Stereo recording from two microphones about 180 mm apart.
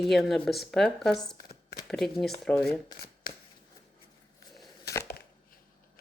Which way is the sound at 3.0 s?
50° left (ahead or behind).